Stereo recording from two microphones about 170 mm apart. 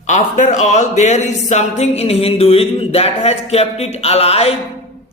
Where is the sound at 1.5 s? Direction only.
40° left (ahead or behind).